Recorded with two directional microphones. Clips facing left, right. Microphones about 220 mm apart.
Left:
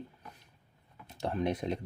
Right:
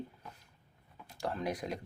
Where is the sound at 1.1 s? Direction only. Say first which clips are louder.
Left 4 dB; 25° left (ahead or behind).